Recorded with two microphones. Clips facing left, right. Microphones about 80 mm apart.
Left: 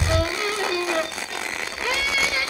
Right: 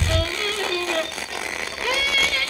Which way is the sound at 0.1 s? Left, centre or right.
Centre.